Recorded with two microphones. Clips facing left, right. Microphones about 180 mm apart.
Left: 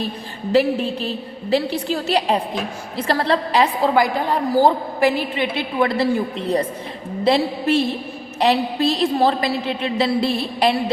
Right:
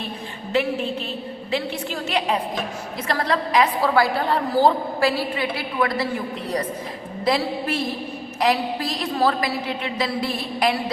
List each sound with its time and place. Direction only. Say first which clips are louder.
0.5 s a woman's voice: left 5 dB; 35° left (ahead or behind)
3.9 s a woman's voice: left 2 dB; 15° left (ahead or behind)
7.3 s a woman's voice: left 5 dB; 25° left (ahead or behind)